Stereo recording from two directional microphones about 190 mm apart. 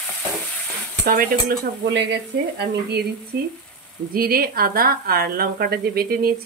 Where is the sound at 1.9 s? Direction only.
65° right (ahead or behind).